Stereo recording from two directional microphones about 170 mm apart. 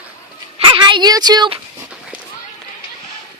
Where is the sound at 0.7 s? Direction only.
25° right (ahead or behind).